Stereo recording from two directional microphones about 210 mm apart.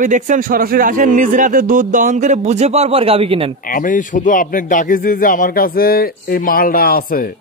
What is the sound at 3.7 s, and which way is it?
A man's voice, 40° left (ahead or behind).